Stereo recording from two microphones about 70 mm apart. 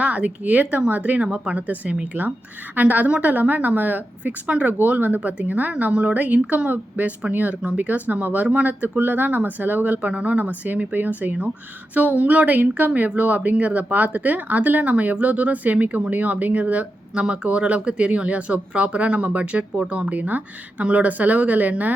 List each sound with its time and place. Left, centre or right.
0.0 s speech: centre